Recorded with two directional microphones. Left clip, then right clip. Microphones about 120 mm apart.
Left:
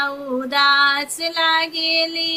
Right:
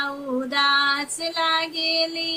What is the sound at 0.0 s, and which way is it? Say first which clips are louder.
Female singing: left 4 dB; 15° left (ahead or behind).